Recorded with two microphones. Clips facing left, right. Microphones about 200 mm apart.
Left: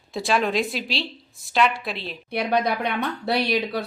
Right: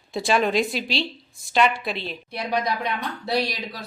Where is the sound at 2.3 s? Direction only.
60° left (ahead or behind).